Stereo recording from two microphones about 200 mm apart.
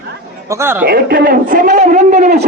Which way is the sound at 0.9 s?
50° right (ahead or behind).